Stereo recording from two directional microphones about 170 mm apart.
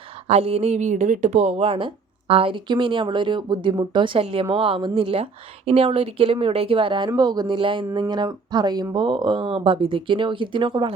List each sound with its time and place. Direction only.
0.3 s speech: 40° right (ahead or behind)